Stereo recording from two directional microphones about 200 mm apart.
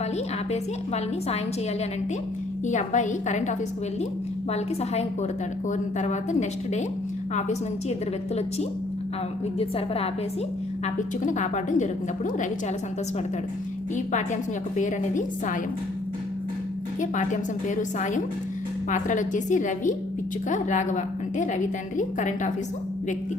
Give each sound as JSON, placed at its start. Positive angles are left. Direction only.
{"t": 2.6, "sound": "a woman's voice", "side_deg": 35}
{"t": 4.5, "sound": "a woman's voice", "side_deg": 30}
{"t": 9.6, "sound": "a woman's voice", "side_deg": 30}
{"t": 13.9, "sound": "a woman's voice", "side_deg": 40}
{"t": 17.0, "sound": "a woman's voice", "side_deg": 40}